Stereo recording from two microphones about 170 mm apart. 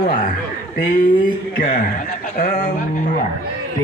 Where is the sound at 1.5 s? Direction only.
50° left (ahead or behind).